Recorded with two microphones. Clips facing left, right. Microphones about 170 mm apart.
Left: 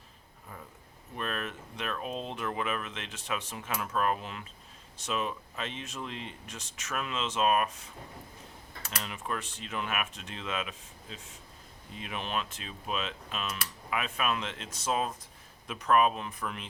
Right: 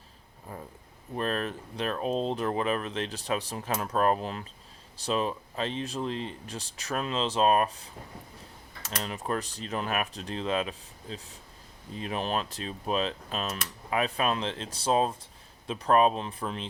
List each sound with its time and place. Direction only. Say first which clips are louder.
0.5 s a sound: right 6 dB; 35° right (ahead or behind)
1.1 s speech: right 6 dB; 35° right (ahead or behind)
9.0 s speech: right 5 dB; 40° right (ahead or behind)